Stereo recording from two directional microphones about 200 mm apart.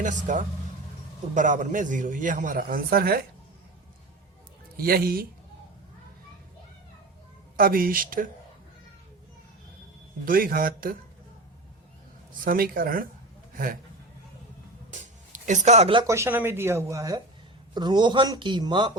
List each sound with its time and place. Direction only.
0.0 s a man's voice: 40° right (ahead or behind)
4.8 s speech: 50° right (ahead or behind)
7.5 s speech: 45° right (ahead or behind)
10.2 s speech: 45° right (ahead or behind)
12.5 s speech: 45° right (ahead or behind)
14.9 s a sound: 40° right (ahead or behind)
16.0 s a man's voice: 15° right (ahead or behind)